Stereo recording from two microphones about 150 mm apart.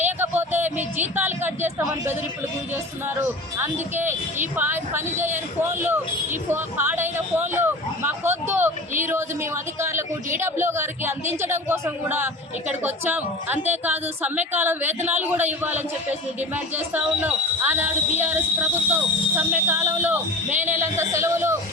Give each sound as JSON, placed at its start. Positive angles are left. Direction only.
{"t": 0.0, "sound": "speech", "side_deg": -15}
{"t": 3.2, "sound": "a woman's voice", "side_deg": -15}
{"t": 6.5, "sound": "a sound", "side_deg": -15}
{"t": 9.0, "sound": "a woman's voice", "side_deg": -15}